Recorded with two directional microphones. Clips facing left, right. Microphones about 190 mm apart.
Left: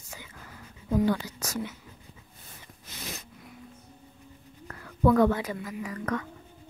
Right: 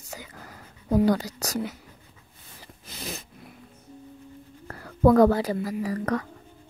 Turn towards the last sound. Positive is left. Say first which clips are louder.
# right 5 dB
turn(degrees=-35)  # may be behind; listen again after turning